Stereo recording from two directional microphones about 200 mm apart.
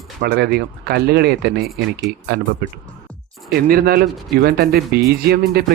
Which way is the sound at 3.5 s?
50° right (ahead or behind).